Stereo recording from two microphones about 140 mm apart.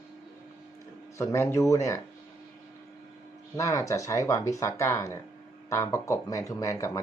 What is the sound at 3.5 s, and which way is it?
Speech, 20° left (ahead or behind).